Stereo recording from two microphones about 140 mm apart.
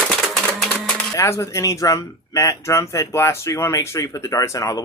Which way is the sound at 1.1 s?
20° left (ahead or behind).